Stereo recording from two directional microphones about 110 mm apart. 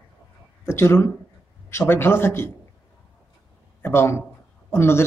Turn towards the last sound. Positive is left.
turn(degrees=20)  # may be behind; listen again after turning